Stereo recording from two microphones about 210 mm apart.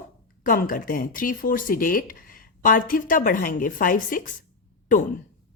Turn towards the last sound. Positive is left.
turn(degrees=35)  # may be behind; listen again after turning